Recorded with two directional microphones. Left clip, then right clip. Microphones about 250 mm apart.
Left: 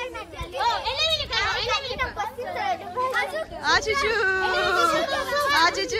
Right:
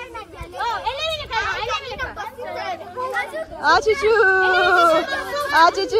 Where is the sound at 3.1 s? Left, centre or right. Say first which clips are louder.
Right 4 dB; centre.